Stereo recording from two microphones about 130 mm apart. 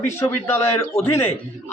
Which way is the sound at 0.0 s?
15° left (ahead or behind).